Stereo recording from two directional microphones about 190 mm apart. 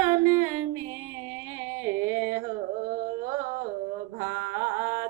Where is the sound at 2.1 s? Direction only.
45° right (ahead or behind).